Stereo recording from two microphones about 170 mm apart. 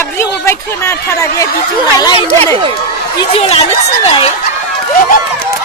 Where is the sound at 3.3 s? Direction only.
35° left (ahead or behind).